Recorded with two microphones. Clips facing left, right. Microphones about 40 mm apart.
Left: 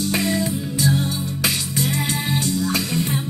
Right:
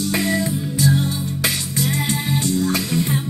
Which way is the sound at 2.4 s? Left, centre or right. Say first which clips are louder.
Right 2 dB; right.